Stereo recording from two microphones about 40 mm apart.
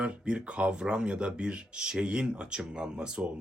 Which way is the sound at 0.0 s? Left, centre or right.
Right.